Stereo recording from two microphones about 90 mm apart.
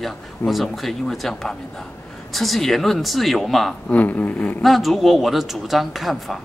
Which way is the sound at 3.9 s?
20° left (ahead or behind).